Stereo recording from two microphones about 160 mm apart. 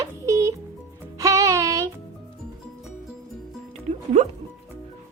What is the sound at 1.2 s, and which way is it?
Music, 20° right (ahead or behind).